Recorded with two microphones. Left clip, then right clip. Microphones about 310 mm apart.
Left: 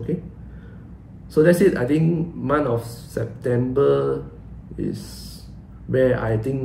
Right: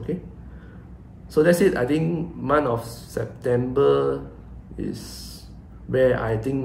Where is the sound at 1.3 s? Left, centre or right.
Centre.